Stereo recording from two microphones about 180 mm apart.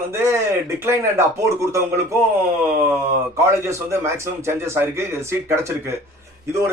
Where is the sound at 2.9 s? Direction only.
15° right (ahead or behind).